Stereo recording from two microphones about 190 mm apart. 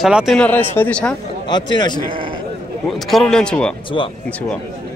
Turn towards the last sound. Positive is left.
turn(degrees=25)  # may be behind; listen again after turning